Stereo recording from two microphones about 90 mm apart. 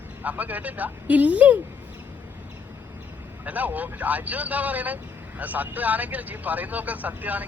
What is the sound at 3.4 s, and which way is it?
Speech, 20° right (ahead or behind).